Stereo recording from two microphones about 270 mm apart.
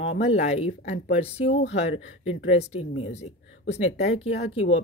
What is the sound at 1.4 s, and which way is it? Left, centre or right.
Speech, left.